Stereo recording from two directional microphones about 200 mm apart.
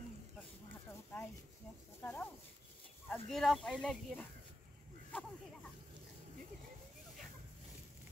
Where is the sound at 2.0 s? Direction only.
10° left (ahead or behind).